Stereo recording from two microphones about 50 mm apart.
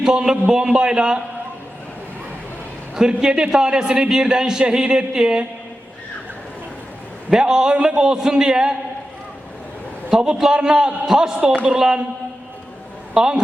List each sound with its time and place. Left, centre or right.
0.0 s a man's voice: centre
2.9 s a man's voice: centre
7.3 s a man's voice: centre
10.1 s a man's voice: centre
13.1 s a man's voice: centre